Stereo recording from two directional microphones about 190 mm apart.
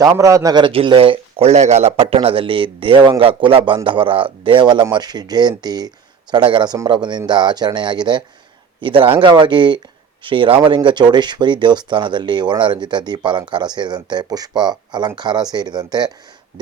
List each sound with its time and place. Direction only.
0.0 s a man's voice: 20° right (ahead or behind)